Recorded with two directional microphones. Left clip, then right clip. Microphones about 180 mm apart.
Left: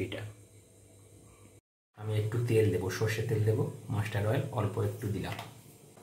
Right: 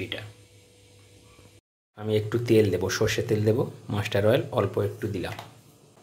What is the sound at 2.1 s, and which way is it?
Speech, 50° right (ahead or behind).